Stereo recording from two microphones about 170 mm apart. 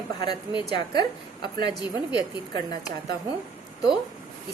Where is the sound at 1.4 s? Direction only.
25° left (ahead or behind).